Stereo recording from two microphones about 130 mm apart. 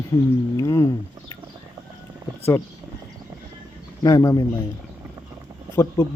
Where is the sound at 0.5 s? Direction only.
25° left (ahead or behind).